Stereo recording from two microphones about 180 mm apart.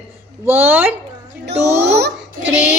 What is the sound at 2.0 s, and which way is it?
Speech, 65° right (ahead or behind).